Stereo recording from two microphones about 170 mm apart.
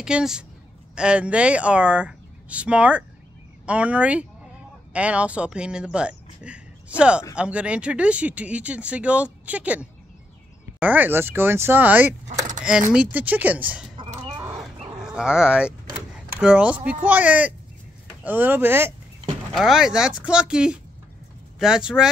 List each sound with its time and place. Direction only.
0.0 s speech: 5° right (ahead or behind)
12.3 s keys jangling: 45° right (ahead or behind)
12.6 s speech: 5° right (ahead or behind)
15.0 s speech: 5° right (ahead or behind)
19.5 s speech: centre (ahead or behind)